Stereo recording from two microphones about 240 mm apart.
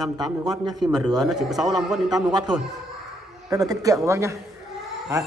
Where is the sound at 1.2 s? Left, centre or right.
Centre.